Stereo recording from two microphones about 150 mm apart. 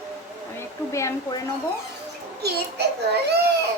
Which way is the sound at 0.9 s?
20° left (ahead or behind).